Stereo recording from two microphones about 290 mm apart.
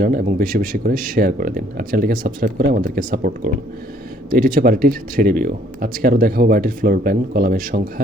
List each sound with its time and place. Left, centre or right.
0.0 s speech: right